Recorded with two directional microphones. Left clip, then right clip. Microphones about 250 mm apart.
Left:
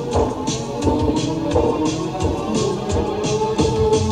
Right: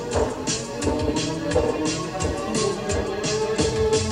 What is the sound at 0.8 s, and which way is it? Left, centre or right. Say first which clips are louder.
Music: left 5 dB; right.